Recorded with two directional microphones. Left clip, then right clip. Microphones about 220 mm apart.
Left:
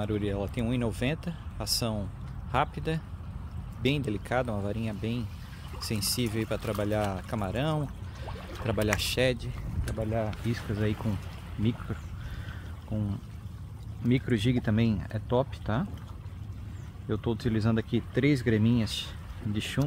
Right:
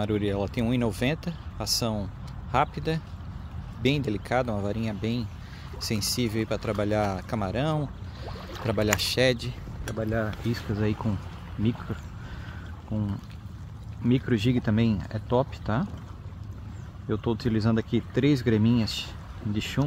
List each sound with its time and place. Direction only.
0.0 s speech: 15° right (ahead or behind)
14.0 s speech: 5° right (ahead or behind)
17.1 s speech: 5° right (ahead or behind)